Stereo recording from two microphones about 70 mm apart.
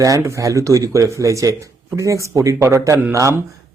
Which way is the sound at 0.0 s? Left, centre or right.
Right.